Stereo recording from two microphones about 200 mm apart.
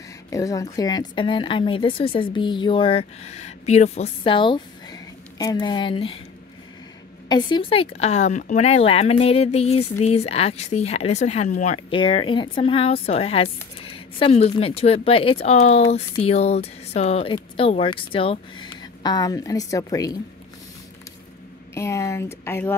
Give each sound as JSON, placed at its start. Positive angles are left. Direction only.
{"t": 0.3, "sound": "speech", "side_deg": 15}
{"t": 7.2, "sound": "speech", "side_deg": 20}
{"t": 21.7, "sound": "speech", "side_deg": 15}